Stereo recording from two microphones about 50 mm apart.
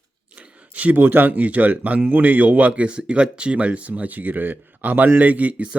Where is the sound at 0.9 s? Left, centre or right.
Right.